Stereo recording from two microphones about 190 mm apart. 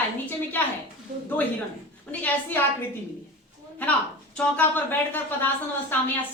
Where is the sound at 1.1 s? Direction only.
40° right (ahead or behind).